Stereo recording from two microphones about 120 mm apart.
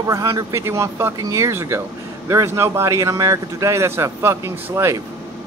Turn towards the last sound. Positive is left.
turn(degrees=-25)  # may be behind; listen again after turning